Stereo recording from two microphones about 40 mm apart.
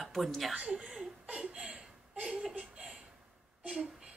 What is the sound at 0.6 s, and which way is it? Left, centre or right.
Speech, right.